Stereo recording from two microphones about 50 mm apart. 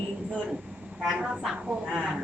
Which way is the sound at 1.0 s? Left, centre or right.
Centre.